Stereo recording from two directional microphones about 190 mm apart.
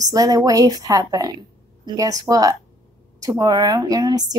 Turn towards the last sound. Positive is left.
turn(degrees=-20)  # may be behind; listen again after turning